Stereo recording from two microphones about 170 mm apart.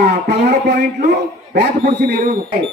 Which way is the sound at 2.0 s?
70° right (ahead or behind).